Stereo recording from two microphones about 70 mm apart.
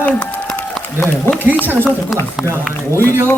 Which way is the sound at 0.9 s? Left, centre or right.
Left.